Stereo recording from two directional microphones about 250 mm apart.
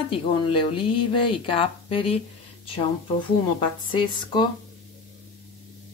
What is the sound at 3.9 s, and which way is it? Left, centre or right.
Speech, centre.